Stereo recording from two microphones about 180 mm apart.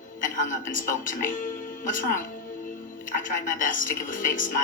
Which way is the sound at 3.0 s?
50° left (ahead or behind).